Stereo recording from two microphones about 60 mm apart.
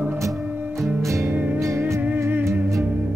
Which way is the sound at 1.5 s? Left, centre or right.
Right.